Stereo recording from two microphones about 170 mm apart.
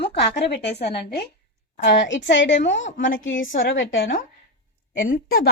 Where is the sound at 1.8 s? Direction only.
90° left.